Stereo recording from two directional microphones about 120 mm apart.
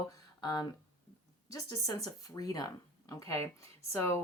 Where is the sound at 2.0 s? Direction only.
30° left (ahead or behind).